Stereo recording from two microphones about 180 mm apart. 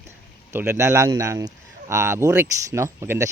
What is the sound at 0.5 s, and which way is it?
Speech, 15° right (ahead or behind).